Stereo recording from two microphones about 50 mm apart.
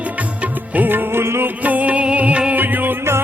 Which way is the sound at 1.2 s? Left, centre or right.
Right.